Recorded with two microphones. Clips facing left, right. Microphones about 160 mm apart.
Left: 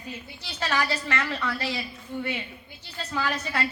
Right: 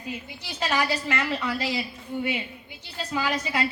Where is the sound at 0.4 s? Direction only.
15° right (ahead or behind).